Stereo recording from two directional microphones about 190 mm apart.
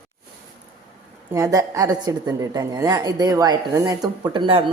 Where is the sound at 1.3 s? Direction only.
15° right (ahead or behind).